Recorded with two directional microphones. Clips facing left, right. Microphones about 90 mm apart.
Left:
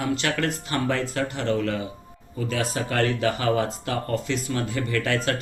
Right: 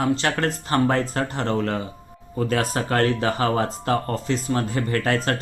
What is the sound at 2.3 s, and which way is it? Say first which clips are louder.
Speech: right 4 dB; 50° right (ahead or behind).